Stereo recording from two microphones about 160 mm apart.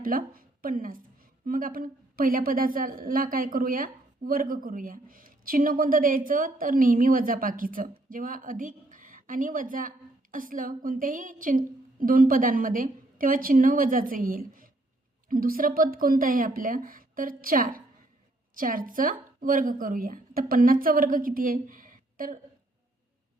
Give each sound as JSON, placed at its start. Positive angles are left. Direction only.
{"t": 0.0, "sound": "a woman's voice", "side_deg": -60}